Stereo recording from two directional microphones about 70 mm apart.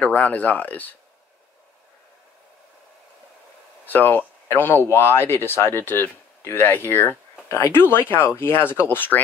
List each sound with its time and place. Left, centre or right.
0.0 s speech: left
3.8 s speech: left